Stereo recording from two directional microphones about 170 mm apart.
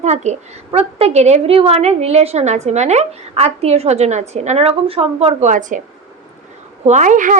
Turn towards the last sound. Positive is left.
turn(degrees=-50)  # may be behind; listen again after turning